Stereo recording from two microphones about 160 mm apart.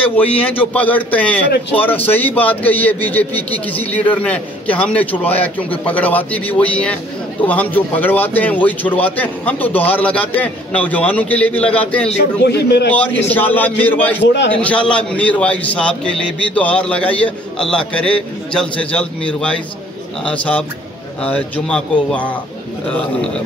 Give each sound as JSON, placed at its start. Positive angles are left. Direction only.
{"t": 0.1, "sound": "a man's voice", "side_deg": 10}
{"t": 12.4, "sound": "a man's voice", "side_deg": 90}
{"t": 12.9, "sound": "a man's voice", "side_deg": 10}